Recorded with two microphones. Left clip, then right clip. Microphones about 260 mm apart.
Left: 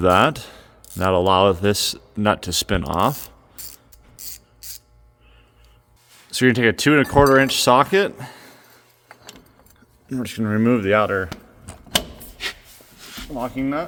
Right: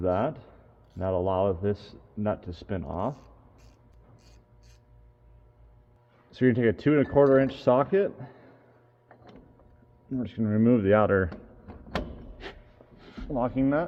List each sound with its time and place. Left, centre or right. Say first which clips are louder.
0.0 s speech: left 12 dB; left
6.3 s speech: left 7 dB; left
10.1 s speech: left 6 dB; left; by 11.3 s centre
13.0 s a sound: left 7 dB; centre
13.3 s speech: left 1 dB; centre